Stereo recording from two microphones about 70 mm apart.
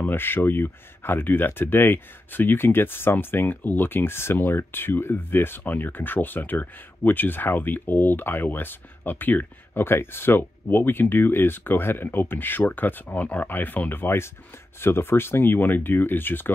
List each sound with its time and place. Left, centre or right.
0.0 s speech: left